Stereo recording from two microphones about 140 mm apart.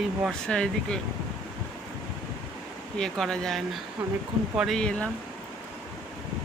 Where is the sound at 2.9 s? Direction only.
5° left (ahead or behind).